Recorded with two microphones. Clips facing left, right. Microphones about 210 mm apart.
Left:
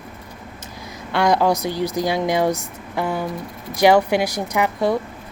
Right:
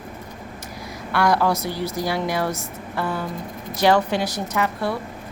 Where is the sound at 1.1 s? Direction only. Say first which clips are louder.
Left 2 dB; 20° left (ahead or behind).